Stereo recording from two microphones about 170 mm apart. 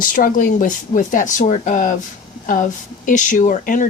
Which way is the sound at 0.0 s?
55° left (ahead or behind).